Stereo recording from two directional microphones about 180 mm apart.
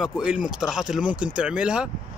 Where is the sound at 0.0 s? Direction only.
5° right (ahead or behind).